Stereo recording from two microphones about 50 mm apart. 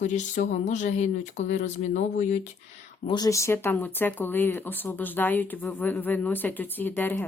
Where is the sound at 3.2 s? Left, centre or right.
Left.